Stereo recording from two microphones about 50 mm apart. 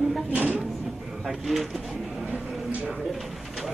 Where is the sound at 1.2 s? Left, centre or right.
Centre.